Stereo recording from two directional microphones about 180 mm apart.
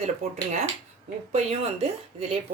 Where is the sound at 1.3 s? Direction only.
35° right (ahead or behind).